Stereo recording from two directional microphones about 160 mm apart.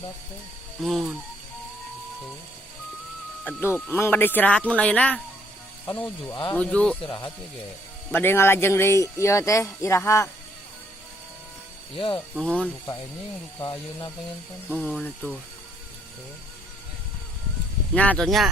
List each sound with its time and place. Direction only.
0.8 s speech: centre (ahead or behind)
3.4 s speech: 15° left (ahead or behind)
6.5 s speech: 5° left (ahead or behind)
7.0 s speech: 30° left (ahead or behind)
8.1 s speech: 15° left (ahead or behind)
11.9 s speech: 35° left (ahead or behind)
12.3 s speech: 5° left (ahead or behind)
13.6 s speech: 30° left (ahead or behind)
14.7 s speech: 5° left (ahead or behind)
17.9 s speech: 10° left (ahead or behind)